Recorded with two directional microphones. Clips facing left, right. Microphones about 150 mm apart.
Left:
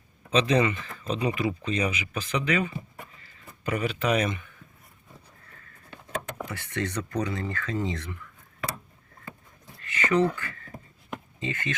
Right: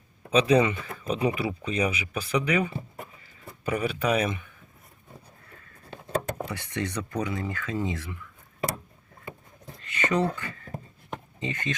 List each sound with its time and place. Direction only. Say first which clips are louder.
0.3 s speech: right 2 dB; 10° right (ahead or behind)
6.1 s vehicle: right 5 dB; 35° right (ahead or behind)
6.5 s speech: even; 15° right (ahead or behind)
9.8 s speech: left 2 dB; 20° right (ahead or behind)